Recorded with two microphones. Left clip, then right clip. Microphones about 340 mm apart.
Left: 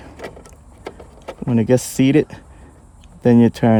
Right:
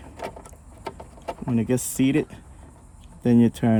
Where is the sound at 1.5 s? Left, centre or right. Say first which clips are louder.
Left 9 dB; left.